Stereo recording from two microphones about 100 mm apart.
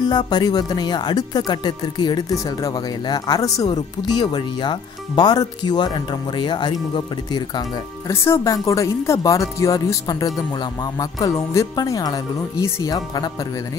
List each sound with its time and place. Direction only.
0.0 s speech: 45° left (ahead or behind)
8.1 s speech: 25° left (ahead or behind)